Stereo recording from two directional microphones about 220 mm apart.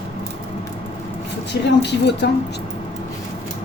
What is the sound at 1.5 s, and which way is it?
Speech, 50° left (ahead or behind).